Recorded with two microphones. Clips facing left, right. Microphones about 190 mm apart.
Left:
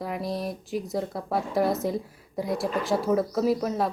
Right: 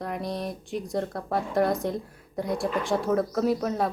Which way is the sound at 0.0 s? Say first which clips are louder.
Left 1 dB; centre (ahead or behind).